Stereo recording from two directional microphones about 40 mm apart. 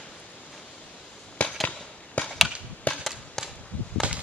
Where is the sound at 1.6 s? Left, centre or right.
Left.